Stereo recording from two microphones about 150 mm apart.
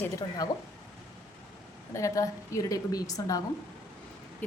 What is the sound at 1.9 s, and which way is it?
A woman's voice, 20° left (ahead or behind).